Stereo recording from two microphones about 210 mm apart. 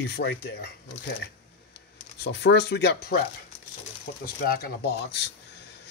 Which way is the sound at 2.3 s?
55° left (ahead or behind).